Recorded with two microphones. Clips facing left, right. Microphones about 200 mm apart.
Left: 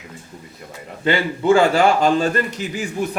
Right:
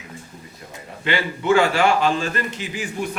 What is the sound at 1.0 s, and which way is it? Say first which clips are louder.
A man's voice: left 4 dB; 35° left (ahead or behind).